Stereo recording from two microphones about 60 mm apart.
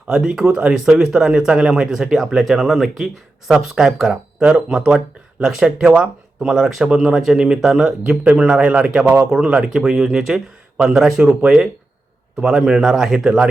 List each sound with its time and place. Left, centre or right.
0.1 s speech: centre